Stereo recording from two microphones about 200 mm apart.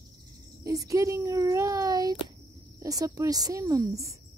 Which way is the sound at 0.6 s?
15° right (ahead or behind).